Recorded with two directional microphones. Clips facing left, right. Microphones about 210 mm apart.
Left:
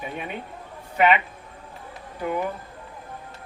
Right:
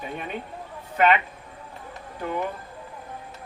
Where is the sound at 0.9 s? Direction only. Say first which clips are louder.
Left 1 dB; 10° left (ahead or behind).